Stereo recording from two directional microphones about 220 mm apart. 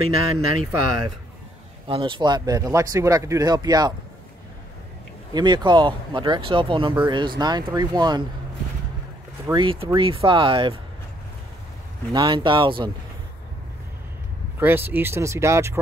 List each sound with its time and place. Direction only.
0.0 s speech: 85° right
1.9 s speech: 25° right (ahead or behind)
5.3 s speech: 20° right (ahead or behind)
9.5 s speech: 20° right (ahead or behind)
12.1 s speech: 20° right (ahead or behind)
14.6 s speech: 10° right (ahead or behind)